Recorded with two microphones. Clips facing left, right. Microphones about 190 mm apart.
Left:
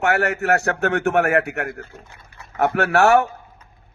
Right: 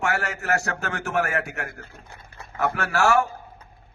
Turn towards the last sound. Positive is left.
turn(degrees=65)  # may be behind; listen again after turning